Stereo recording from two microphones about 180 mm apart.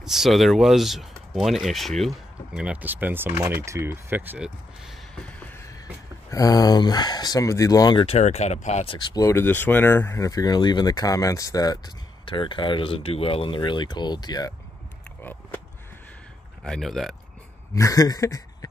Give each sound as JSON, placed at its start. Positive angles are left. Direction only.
{"t": 0.0, "sound": "speech", "side_deg": 0}
{"t": 6.3, "sound": "speech", "side_deg": 20}
{"t": 16.6, "sound": "speech", "side_deg": 0}
{"t": 17.7, "sound": "a sound", "side_deg": 20}